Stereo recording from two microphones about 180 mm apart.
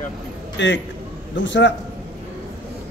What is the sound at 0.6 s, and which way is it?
A man's voice, 90° left.